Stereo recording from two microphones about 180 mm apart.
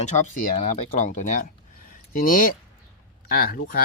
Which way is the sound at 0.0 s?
45° left (ahead or behind).